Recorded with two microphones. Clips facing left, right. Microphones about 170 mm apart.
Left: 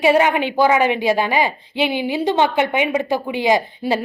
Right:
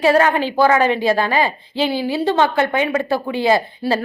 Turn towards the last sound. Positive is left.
turn(degrees=15)  # may be behind; listen again after turning